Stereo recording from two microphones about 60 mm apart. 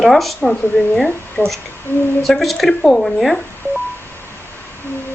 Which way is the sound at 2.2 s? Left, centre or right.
Centre.